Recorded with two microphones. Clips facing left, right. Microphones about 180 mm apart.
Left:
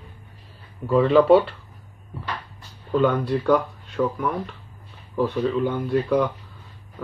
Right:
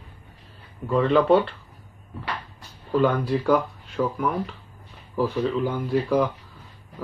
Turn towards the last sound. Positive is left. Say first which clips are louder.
# left 1 dB
turn(degrees=0)  # may be behind; listen again after turning